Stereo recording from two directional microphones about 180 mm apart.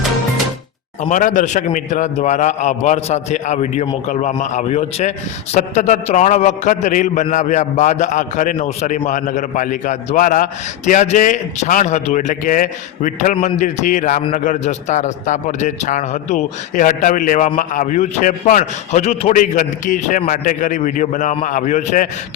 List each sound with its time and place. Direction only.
1.1 s a man's voice: 45° left (ahead or behind)